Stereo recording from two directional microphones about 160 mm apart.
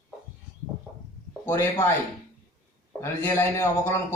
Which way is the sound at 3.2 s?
15° left (ahead or behind).